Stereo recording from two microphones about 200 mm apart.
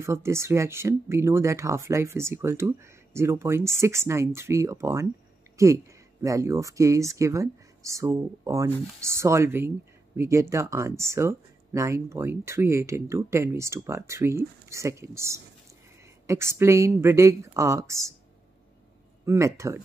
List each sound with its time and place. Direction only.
0.0 s speech: 15° right (ahead or behind)
19.2 s speech: 15° right (ahead or behind)